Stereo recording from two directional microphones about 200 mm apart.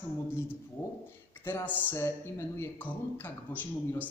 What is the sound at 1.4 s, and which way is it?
A man's voice, 10° left (ahead or behind).